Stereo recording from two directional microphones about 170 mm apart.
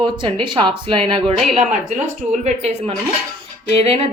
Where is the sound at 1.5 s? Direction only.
45° right (ahead or behind).